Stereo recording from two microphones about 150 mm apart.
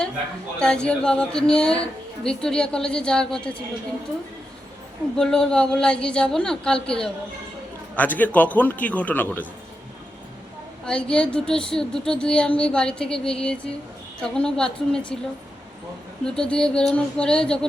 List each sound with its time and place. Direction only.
0.6 s speech: 5° left (ahead or behind)
5.1 s a man's voice: 5° left (ahead or behind)
10.8 s speech: 5° left (ahead or behind)
16.2 s speech: 5° left (ahead or behind)